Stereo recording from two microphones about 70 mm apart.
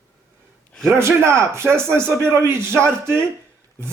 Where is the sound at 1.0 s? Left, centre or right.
Right.